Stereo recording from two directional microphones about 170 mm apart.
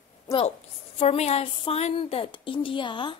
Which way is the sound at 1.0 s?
35° left (ahead or behind).